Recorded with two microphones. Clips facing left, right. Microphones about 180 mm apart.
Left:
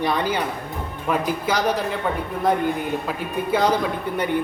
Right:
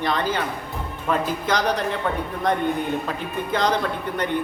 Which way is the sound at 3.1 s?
10° left (ahead or behind).